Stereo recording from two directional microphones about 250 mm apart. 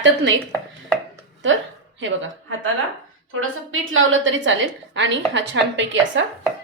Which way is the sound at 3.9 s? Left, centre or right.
Right.